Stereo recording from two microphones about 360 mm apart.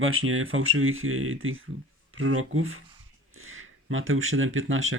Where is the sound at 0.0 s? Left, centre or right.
Right.